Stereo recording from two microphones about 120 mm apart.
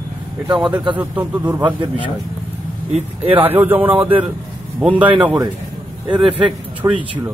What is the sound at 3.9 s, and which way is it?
Speech, 45° right (ahead or behind).